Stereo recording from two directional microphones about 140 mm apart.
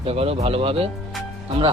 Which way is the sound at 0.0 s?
45° right (ahead or behind).